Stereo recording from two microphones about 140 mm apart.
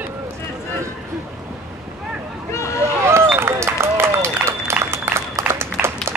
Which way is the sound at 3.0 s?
20° right (ahead or behind).